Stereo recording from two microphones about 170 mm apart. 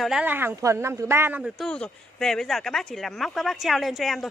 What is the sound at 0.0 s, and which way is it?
A woman's voice, 5° right (ahead or behind).